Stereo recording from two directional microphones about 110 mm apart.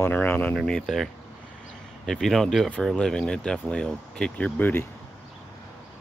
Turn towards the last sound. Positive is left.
turn(degrees=20)  # may be behind; listen again after turning